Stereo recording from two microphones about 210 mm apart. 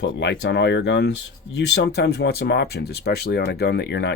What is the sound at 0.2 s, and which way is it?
Speech, 55° left (ahead or behind).